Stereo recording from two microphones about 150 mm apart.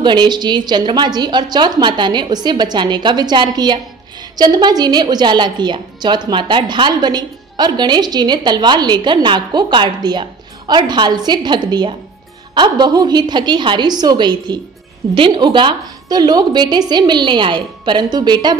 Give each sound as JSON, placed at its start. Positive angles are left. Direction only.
{"t": 0.0, "sound": "a woman's voice", "side_deg": -30}